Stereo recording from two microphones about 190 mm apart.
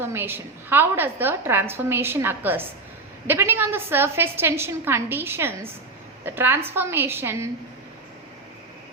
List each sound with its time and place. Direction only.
0.0 s a woman's voice: 10° right (ahead or behind)